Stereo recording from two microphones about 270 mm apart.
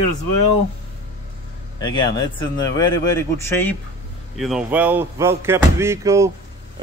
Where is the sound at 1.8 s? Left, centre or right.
Centre.